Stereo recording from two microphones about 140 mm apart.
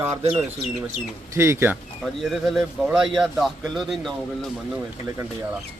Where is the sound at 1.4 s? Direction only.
15° right (ahead or behind).